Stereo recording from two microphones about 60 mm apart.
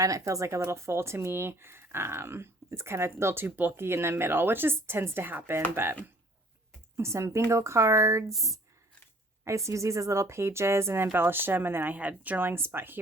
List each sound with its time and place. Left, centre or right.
0.0 s speech: right
6.9 s speech: right
8.3 s speech: centre
9.4 s speech: right
11.9 s speech: right